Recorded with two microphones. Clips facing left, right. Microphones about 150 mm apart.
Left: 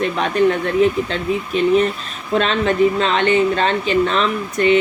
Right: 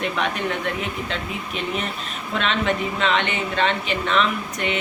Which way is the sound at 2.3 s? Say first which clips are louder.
Left 7 dB; 35° left (ahead or behind).